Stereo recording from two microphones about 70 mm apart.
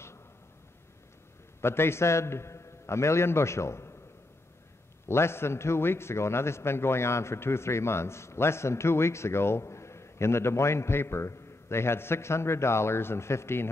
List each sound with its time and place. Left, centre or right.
1.6 s a man's voice: left
5.0 s a man's voice: left